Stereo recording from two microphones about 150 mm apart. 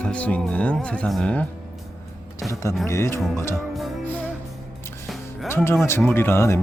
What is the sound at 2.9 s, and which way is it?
Speech, 20° left (ahead or behind).